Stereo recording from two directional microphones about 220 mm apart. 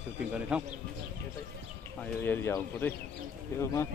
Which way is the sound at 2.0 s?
10° left (ahead or behind).